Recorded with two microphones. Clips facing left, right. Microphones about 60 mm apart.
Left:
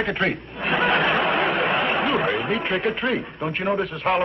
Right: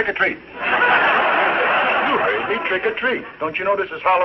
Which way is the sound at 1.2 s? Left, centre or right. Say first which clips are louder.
Right 4 dB; right.